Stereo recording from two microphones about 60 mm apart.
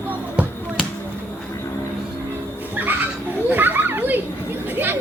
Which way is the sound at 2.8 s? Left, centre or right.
Right.